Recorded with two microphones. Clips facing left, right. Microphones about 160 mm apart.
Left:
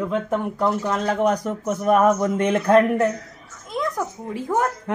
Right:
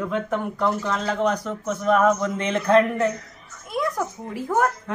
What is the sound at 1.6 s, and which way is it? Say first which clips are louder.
Speech: left 2 dB; 15° left (ahead or behind).